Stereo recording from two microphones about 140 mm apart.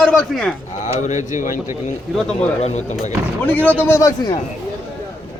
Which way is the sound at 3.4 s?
10° left (ahead or behind).